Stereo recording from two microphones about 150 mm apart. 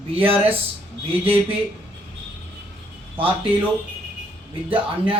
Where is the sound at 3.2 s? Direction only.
35° right (ahead or behind).